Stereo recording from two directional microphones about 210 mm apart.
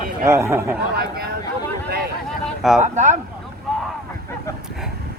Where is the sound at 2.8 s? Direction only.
35° right (ahead or behind).